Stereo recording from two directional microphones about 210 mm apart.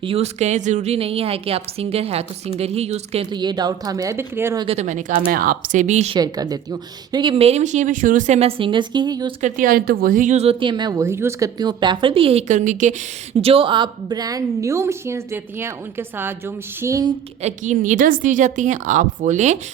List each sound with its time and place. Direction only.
0.0 s speech: 30° right (ahead or behind); by 4.6 s 10° right (ahead or behind)
4.6 s a woman's voice: 30° right (ahead or behind)
6.1 s speech: 20° right (ahead or behind)
9.4 s speech: 40° right (ahead or behind)
13.4 s a woman's voice: 25° right (ahead or behind)
17.4 s a woman's voice: 35° right (ahead or behind)